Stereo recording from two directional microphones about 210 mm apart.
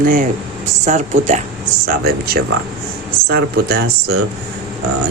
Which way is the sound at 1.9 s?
45° right (ahead or behind).